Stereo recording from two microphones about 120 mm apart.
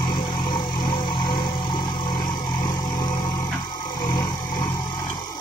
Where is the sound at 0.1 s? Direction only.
35° left (ahead or behind).